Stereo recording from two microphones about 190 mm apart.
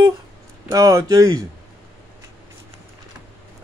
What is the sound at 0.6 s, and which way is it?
Speech, 20° right (ahead or behind).